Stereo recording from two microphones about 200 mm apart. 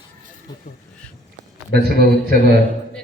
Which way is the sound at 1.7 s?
55° right (ahead or behind).